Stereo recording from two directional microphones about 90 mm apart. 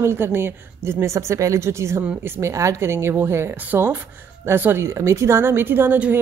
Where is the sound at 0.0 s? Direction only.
25° right (ahead or behind).